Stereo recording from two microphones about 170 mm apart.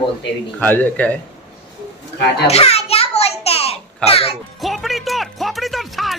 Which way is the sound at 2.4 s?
35° left (ahead or behind).